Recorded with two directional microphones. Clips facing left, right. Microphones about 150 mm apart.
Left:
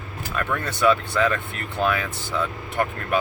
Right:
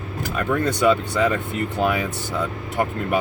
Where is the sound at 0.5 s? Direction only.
15° right (ahead or behind).